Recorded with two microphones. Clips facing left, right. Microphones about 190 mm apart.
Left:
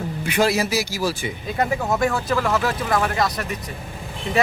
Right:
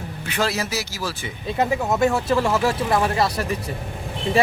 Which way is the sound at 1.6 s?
25° right (ahead or behind).